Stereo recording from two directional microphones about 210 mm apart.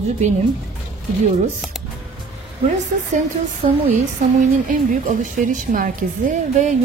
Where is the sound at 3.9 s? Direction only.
40° right (ahead or behind).